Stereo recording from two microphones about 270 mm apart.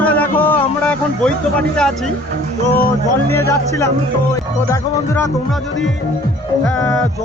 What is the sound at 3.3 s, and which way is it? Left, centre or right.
Speech, centre.